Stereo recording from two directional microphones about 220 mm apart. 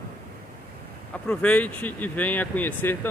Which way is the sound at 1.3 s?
5° left (ahead or behind).